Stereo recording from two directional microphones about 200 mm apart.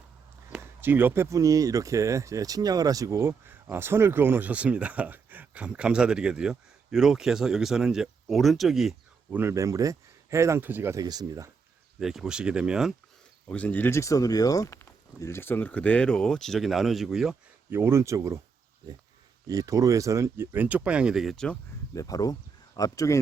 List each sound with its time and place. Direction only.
0.5 s speech: 10° right (ahead or behind)
11.9 s speech: centre (ahead or behind)
19.5 s speech: 15° right (ahead or behind); by 21.6 s 5° left (ahead or behind)
21.9 s speech: 20° left (ahead or behind)